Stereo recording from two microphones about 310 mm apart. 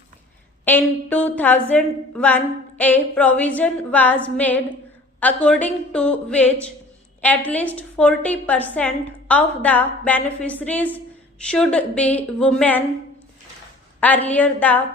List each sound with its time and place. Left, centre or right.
0.6 s a woman's voice: centre
14.0 s a woman's voice: centre